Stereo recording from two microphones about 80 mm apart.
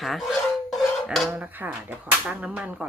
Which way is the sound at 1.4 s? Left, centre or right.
Right.